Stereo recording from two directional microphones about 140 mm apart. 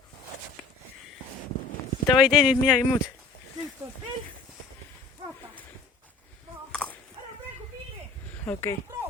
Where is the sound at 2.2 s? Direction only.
5° right (ahead or behind).